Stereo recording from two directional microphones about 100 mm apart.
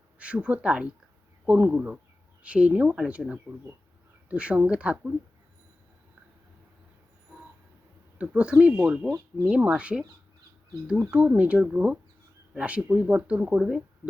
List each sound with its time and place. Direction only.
0.2 s speech: 10° right (ahead or behind)
8.2 s speech: 15° right (ahead or behind)
11.1 s speech: 15° right (ahead or behind)